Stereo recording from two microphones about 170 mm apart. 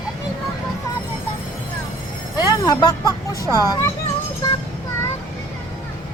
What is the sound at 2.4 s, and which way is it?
Speech, 25° left (ahead or behind).